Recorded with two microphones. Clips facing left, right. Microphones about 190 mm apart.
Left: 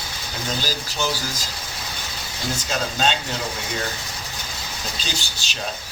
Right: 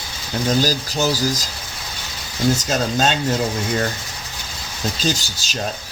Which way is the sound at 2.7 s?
45° right (ahead or behind).